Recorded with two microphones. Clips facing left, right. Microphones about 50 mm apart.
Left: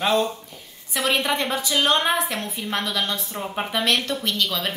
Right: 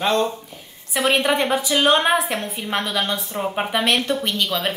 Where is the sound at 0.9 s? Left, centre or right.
Right.